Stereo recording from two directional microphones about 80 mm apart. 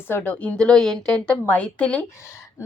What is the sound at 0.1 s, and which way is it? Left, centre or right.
A woman's voice, centre.